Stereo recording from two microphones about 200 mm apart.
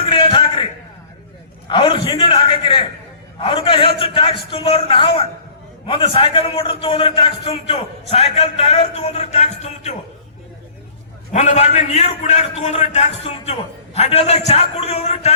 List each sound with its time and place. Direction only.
0.0 s a sound: 25° left (ahead or behind)
1.7 s a man's voice: 25° left (ahead or behind)
11.3 s a man's voice: 35° left (ahead or behind)